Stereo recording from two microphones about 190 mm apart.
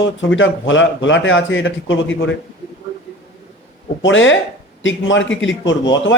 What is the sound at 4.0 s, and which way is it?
Speech, 85° left.